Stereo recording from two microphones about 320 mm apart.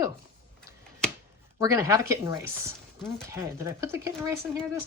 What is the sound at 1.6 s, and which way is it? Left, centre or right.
Speech, centre.